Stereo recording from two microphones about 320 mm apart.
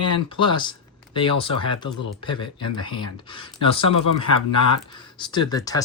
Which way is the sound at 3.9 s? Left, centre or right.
Left.